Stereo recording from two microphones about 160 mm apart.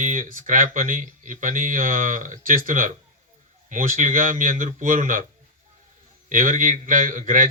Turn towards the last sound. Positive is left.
turn(degrees=-55)  # may be behind; listen again after turning